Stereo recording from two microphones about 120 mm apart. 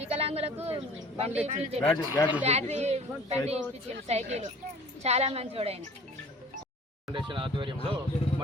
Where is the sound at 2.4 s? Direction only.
65° right (ahead or behind).